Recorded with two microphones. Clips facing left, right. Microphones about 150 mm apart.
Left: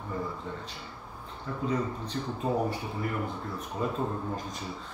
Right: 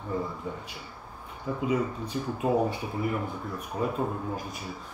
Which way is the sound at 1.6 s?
10° right (ahead or behind).